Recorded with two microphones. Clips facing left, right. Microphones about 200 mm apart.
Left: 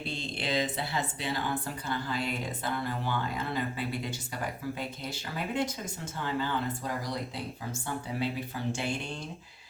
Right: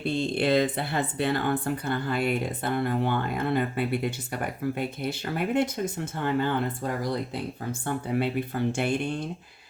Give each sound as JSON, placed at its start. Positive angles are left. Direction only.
{"t": 0.1, "sound": "speech", "side_deg": -60}
{"t": 8.2, "sound": "speech", "side_deg": -60}